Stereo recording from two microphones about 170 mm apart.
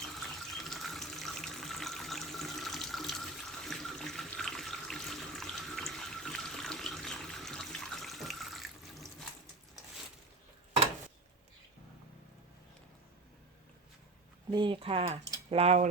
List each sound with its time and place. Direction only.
0.0 s water tap: centre (ahead or behind)
14.5 s speech: 30° right (ahead or behind)